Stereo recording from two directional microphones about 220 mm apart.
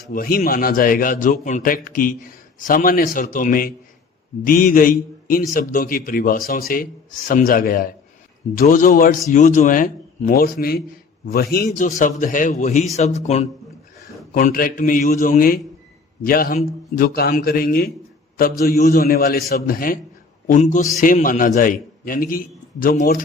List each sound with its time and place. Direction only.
0.1 s a man's voice: 40° left (ahead or behind)